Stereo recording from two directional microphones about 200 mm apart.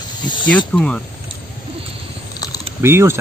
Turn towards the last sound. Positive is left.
turn(degrees=-10)  # may be behind; listen again after turning